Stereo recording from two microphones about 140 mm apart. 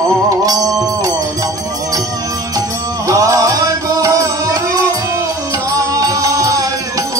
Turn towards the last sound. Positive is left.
turn(degrees=-25)  # may be behind; listen again after turning